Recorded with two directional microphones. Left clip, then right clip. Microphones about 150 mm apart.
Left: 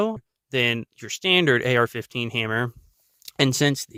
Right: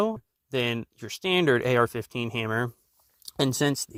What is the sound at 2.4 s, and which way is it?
Speech, 20° left (ahead or behind).